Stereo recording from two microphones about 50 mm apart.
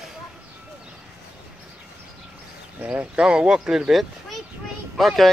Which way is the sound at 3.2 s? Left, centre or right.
Centre.